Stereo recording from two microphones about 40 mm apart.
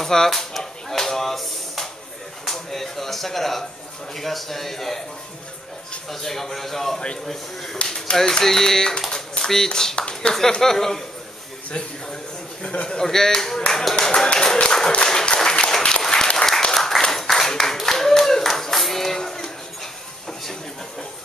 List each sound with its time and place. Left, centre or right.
0.0 s a sound: centre
2.4 s speech: centre
6.0 s speech: centre
9.9 s speech: left
10.6 s speech: centre
12.8 s speech: centre
15.0 s applause: centre
16.7 s clapping: centre